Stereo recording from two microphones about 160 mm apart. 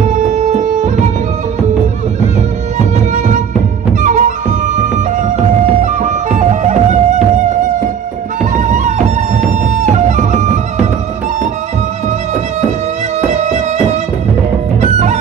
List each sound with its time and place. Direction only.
0.4 s music: 45° right (ahead or behind)
3.1 s music: 50° right (ahead or behind)
8.5 s music: 50° right (ahead or behind)
13.3 s music: 45° right (ahead or behind)